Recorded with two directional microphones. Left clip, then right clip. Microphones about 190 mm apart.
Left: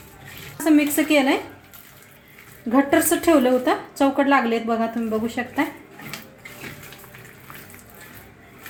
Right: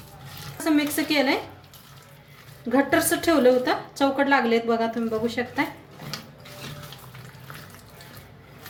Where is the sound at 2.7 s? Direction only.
25° left (ahead or behind).